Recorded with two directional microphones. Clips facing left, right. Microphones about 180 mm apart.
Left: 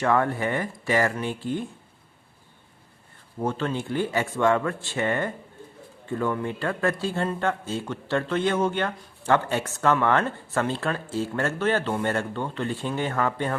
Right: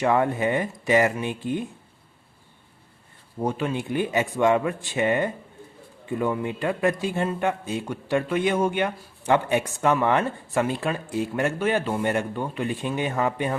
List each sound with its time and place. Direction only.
0.0 s speech: 20° right (ahead or behind)
3.3 s a man's voice: 15° right (ahead or behind)